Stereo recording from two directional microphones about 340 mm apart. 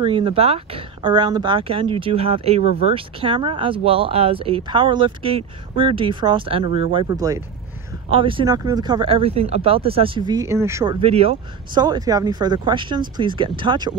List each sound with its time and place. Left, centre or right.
0.0 s speech: centre
2.6 s speech: left
2.9 s speech: centre